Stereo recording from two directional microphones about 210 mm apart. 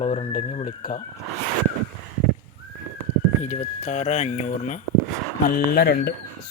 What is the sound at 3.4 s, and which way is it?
Speech, 35° left (ahead or behind).